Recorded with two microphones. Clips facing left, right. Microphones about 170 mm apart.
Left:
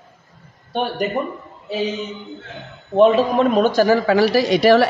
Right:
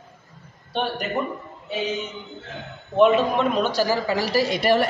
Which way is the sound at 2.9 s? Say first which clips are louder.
Left 4 dB; 35° left (ahead or behind).